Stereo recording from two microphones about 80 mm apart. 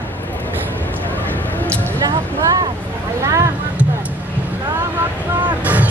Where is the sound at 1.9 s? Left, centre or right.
Right.